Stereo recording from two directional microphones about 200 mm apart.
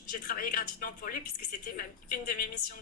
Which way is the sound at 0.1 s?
45° left (ahead or behind).